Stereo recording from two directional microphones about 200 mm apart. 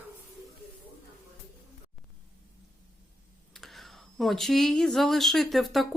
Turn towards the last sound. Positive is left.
turn(degrees=0)  # may be behind; listen again after turning